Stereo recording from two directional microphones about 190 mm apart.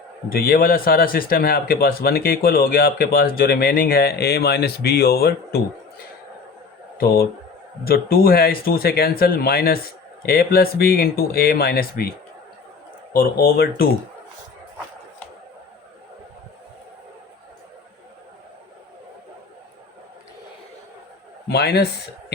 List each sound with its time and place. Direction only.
0.3 s a man's voice: 50° left (ahead or behind)
7.9 s a man's voice: 50° left (ahead or behind)
13.1 s a man's voice: 55° left (ahead or behind)
21.5 s speech: 60° left (ahead or behind)